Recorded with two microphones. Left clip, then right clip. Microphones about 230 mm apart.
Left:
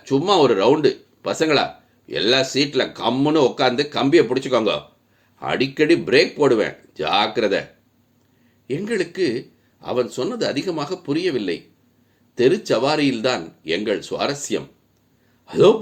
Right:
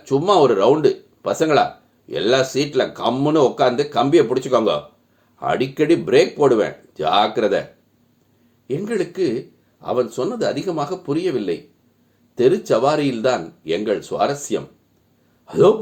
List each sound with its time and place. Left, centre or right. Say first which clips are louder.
0.0 s speech: right 2 dB; left
8.6 s speech: right 1 dB; left